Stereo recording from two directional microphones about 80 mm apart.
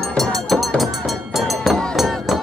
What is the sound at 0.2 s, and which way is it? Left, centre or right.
Music, centre.